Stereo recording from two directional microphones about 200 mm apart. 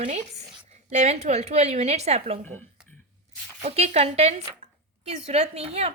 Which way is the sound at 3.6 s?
30° right (ahead or behind).